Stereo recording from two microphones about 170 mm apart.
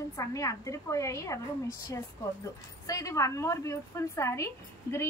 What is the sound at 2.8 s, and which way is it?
A woman's voice, 20° left (ahead or behind).